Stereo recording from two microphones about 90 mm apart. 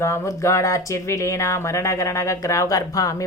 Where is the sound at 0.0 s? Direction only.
35° left (ahead or behind).